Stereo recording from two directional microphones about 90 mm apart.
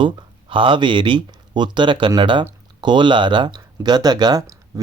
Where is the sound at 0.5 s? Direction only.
70° right (ahead or behind).